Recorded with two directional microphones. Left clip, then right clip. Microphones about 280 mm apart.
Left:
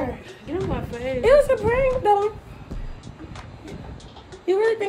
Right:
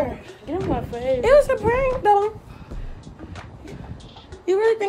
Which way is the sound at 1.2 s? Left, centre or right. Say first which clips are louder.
Even; centre.